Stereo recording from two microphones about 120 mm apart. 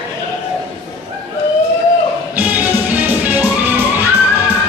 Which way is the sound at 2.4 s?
15° right (ahead or behind).